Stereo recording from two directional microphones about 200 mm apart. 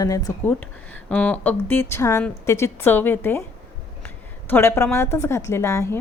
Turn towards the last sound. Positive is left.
turn(degrees=15)  # may be behind; listen again after turning